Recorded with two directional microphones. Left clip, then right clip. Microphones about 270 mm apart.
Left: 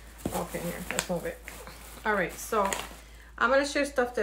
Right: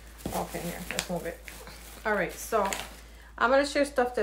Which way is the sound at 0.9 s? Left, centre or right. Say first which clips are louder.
Left 1 dB; left.